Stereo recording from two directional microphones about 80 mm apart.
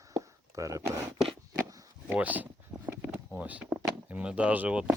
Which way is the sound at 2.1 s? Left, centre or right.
Centre.